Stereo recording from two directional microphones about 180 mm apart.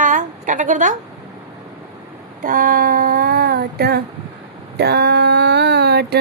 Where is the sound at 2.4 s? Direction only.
50° right (ahead or behind).